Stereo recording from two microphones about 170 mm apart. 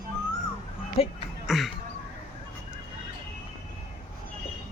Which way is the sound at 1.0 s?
35° left (ahead or behind).